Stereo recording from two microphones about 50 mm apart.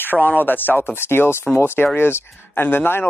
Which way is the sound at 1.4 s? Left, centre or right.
Left.